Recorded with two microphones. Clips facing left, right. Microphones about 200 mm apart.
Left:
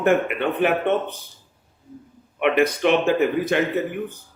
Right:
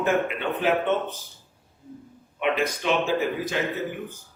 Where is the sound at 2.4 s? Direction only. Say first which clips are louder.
Left 6 dB; 65° left (ahead or behind).